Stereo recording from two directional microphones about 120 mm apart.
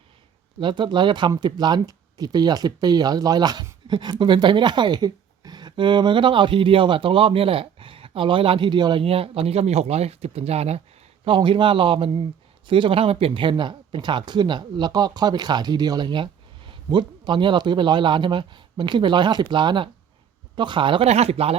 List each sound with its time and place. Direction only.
0.6 s speech: 40° right (ahead or behind); by 10.8 s 60° right (ahead or behind)
11.3 s speech: 45° right (ahead or behind)
21.1 s speech: 60° right (ahead or behind)